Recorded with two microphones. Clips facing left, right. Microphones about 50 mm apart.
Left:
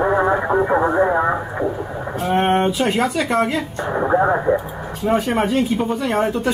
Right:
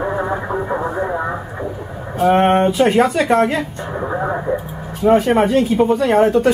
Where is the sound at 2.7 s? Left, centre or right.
Right.